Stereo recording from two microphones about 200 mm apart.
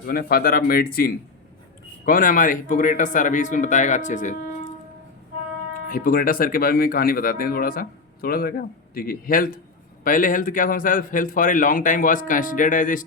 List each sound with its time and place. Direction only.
0.0 s a man's voice: 50° left (ahead or behind)
5.9 s a man's voice: 45° left (ahead or behind)